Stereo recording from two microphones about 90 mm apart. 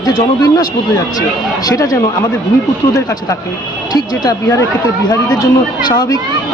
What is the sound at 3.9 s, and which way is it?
Speech, 45° left (ahead or behind).